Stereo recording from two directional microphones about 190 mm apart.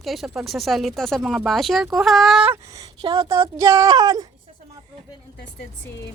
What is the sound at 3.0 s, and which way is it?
Speech, 25° right (ahead or behind).